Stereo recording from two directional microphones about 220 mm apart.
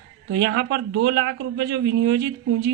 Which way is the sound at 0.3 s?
50° right (ahead or behind).